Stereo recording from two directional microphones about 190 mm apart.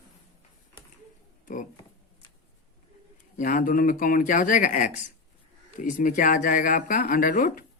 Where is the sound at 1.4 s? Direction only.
45° left (ahead or behind).